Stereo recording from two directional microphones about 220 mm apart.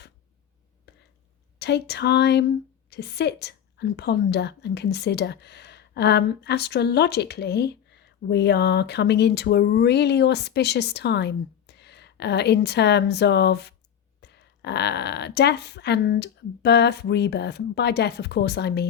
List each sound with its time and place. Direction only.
0.9 s whispering: 50° left (ahead or behind)
1.5 s a woman's voice: 50° left (ahead or behind)